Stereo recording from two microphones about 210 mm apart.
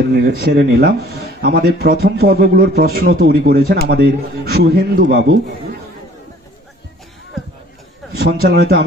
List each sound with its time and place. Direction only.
0.1 s speech: 50° right (ahead or behind)
8.2 s speech: 50° right (ahead or behind)